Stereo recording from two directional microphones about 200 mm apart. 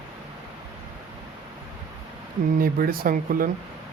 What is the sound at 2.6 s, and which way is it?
Speech, 45° right (ahead or behind).